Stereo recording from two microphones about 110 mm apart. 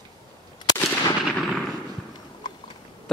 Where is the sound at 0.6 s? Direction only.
40° left (ahead or behind).